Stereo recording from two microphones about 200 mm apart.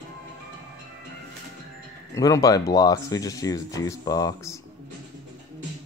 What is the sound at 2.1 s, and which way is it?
Speech, 15° left (ahead or behind).